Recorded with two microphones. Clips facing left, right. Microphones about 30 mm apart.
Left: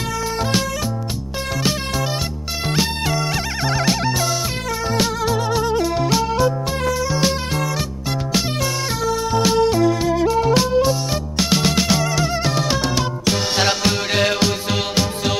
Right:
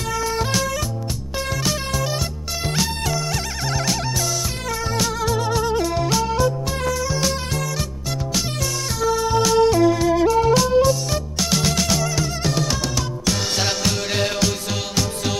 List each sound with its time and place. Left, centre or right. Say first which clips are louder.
1.6 s music: left 4 dB; left
6.0 s music: left 2 dB; centre
10.4 s music: even; left